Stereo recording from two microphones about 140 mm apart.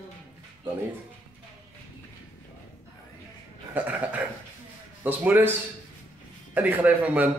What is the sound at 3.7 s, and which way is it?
A man's voice, 10° right (ahead or behind).